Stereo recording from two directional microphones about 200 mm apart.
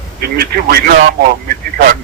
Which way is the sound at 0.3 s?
50° right (ahead or behind).